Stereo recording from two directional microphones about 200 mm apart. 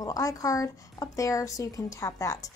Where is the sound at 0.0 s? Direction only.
15° left (ahead or behind).